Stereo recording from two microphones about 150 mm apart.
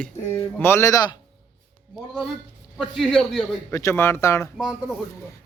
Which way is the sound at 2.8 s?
Centre (ahead or behind).